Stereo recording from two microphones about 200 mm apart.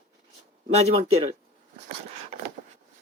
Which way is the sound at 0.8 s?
30° right (ahead or behind).